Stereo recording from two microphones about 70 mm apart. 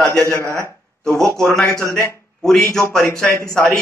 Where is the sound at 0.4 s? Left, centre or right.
Right.